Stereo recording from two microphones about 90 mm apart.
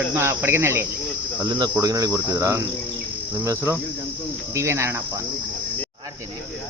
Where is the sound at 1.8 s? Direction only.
40° right (ahead or behind).